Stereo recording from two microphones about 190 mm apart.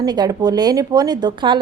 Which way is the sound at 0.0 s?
20° right (ahead or behind).